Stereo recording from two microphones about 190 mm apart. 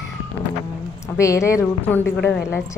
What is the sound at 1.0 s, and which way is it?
A woman's voice, 15° left (ahead or behind).